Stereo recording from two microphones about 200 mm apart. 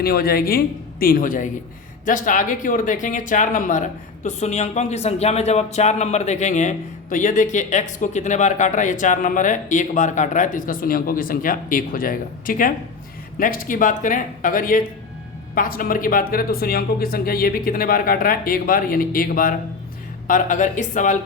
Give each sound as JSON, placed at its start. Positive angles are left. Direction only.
{"t": 0.0, "sound": "speech", "side_deg": 50}